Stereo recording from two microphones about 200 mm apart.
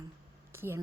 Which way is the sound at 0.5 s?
10° right (ahead or behind).